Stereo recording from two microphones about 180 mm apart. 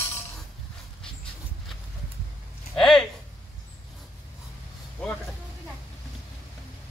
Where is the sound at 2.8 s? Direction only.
Centre (ahead or behind).